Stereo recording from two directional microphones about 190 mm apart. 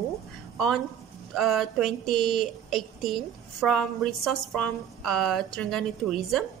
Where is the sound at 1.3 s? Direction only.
Centre (ahead or behind).